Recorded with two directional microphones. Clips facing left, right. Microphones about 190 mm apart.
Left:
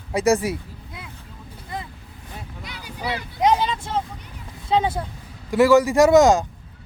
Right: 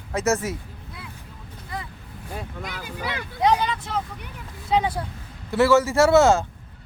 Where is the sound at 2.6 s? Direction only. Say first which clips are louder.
Right 2 dB; 50° right (ahead or behind).